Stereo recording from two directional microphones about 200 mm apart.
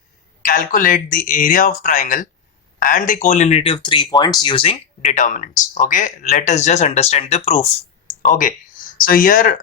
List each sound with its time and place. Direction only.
0.4 s speech: 45° left (ahead or behind)